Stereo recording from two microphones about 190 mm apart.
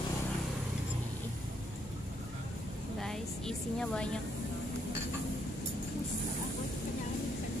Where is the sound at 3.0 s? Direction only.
5° left (ahead or behind).